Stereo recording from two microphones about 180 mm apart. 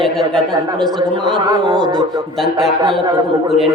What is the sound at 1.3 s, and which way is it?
Speech, 25° right (ahead or behind).